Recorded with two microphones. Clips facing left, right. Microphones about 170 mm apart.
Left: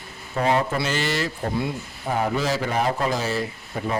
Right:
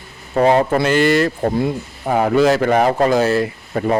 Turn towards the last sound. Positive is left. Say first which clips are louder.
# right 9 dB
turn(degrees=-65)  # may be behind; listen again after turning